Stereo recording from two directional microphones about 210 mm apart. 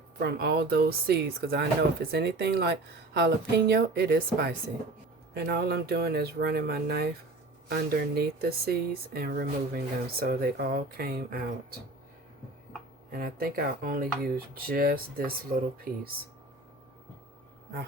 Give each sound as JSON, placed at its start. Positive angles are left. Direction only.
{"t": 0.2, "sound": "speech", "side_deg": -50}
{"t": 13.1, "sound": "speech", "side_deg": -45}